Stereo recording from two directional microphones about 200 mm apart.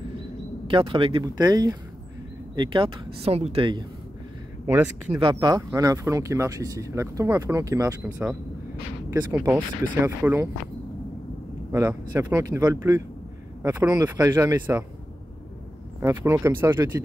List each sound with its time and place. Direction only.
0.7 s speech: 25° right (ahead or behind)
5.2 s speech: 20° right (ahead or behind)
11.7 s speech: 10° right (ahead or behind)
16.0 s speech: 15° right (ahead or behind)